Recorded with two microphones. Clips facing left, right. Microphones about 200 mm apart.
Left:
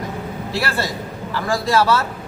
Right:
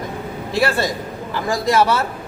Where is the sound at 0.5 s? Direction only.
20° right (ahead or behind).